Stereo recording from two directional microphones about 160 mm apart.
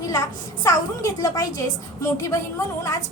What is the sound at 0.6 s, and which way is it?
A woman's voice, 20° left (ahead or behind).